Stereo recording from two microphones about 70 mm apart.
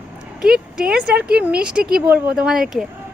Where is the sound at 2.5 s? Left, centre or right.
Centre.